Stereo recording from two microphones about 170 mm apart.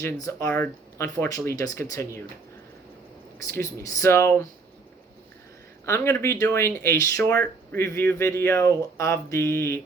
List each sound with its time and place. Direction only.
0.0 s speech: 15° left (ahead or behind)
3.5 s speech: 15° left (ahead or behind)
5.8 s speech: 15° left (ahead or behind)